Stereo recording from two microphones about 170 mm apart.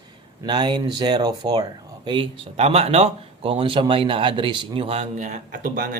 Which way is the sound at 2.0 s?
35° right (ahead or behind).